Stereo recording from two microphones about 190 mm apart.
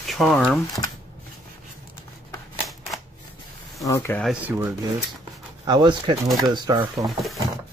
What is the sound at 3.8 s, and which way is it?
Speech, 15° left (ahead or behind).